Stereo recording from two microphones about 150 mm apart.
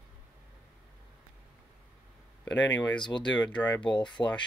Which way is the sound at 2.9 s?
30° left (ahead or behind).